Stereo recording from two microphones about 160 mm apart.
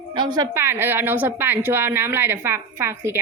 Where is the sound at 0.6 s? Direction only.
15° right (ahead or behind).